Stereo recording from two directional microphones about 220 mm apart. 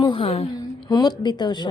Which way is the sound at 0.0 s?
25° left (ahead or behind).